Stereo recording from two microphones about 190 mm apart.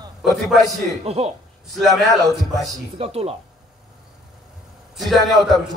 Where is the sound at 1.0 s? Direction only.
35° right (ahead or behind).